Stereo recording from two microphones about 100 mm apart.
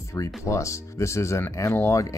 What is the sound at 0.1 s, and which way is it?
Speech, 30° left (ahead or behind).